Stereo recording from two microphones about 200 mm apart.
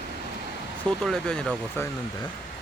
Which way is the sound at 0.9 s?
5° left (ahead or behind).